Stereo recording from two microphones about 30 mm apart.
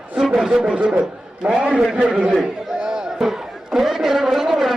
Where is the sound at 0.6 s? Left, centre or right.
Right.